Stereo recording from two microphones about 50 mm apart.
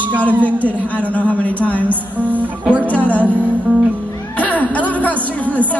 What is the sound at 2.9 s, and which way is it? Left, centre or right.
Music, left.